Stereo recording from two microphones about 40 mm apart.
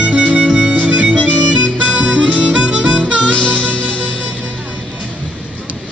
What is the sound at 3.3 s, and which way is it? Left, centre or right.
Music, left.